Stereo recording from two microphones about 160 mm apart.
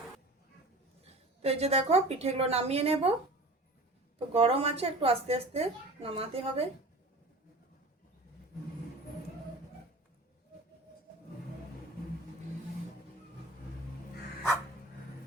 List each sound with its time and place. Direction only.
1.0 s a woman's voice: 40° right (ahead or behind)
4.3 s a woman's voice: 40° right (ahead or behind)